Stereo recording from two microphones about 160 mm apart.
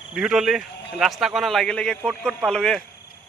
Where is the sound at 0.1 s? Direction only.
5° right (ahead or behind).